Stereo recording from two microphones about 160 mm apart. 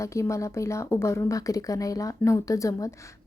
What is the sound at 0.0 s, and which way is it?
Speech, 20° left (ahead or behind).